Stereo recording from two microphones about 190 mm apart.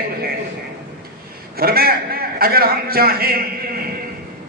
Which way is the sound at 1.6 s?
50° right (ahead or behind).